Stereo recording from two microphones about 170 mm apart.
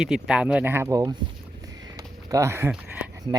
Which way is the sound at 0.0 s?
5° right (ahead or behind).